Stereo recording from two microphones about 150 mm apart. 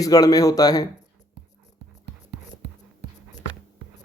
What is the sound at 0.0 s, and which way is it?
Speech, 25° left (ahead or behind).